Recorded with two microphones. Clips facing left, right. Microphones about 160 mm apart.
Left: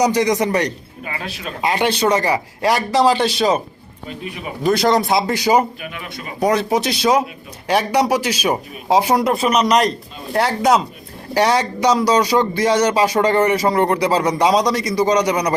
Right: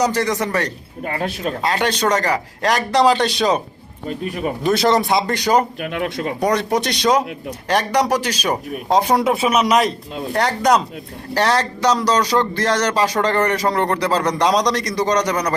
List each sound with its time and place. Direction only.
0.0 s speech: 15° left (ahead or behind)
1.0 s speech: 50° right (ahead or behind)
1.6 s speech: 10° left (ahead or behind)
4.3 s speech: 45° right (ahead or behind)
4.6 s speech: centre (ahead or behind)
5.8 s speech: 75° right (ahead or behind)
6.4 s speech: 5° left (ahead or behind)